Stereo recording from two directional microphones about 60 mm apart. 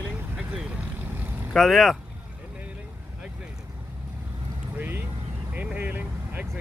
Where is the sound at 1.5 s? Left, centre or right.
Centre.